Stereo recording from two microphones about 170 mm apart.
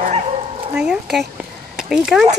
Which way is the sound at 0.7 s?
5° right (ahead or behind).